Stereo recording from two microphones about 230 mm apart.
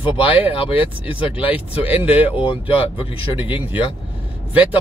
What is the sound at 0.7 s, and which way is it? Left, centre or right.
Speech, centre.